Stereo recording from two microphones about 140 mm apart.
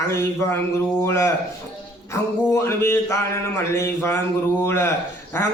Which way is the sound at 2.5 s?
20° left (ahead or behind).